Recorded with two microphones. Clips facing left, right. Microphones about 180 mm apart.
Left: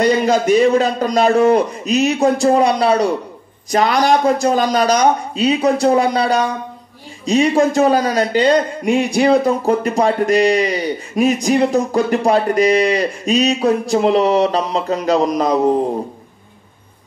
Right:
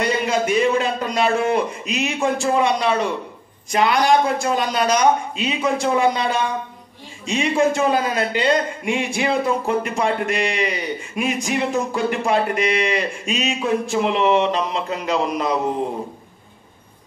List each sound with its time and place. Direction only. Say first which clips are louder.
0.0 s speech: left 6 dB; 35° left (ahead or behind)